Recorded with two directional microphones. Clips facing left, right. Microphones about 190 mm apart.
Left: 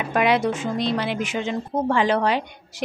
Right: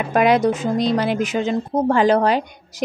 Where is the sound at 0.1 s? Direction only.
40° right (ahead or behind).